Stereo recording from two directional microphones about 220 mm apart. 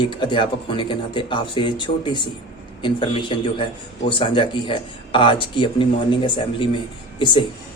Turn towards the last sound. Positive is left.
turn(degrees=20)  # may be behind; listen again after turning